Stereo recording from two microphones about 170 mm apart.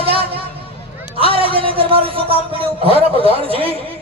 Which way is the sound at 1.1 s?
35° right (ahead or behind).